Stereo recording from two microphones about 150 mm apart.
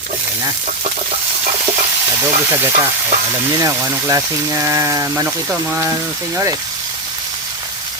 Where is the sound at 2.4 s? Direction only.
20° right (ahead or behind).